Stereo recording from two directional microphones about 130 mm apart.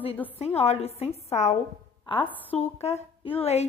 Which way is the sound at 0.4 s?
55° left (ahead or behind).